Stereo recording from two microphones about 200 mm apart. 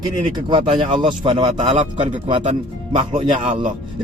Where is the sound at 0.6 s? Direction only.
35° right (ahead or behind).